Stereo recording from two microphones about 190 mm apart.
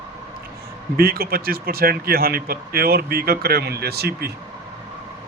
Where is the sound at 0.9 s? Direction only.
55° right (ahead or behind).